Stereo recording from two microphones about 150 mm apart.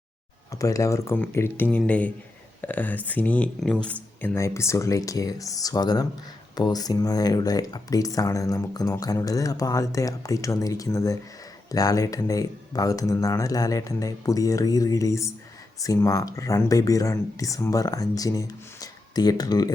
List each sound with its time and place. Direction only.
0.5 s speech: 20° left (ahead or behind)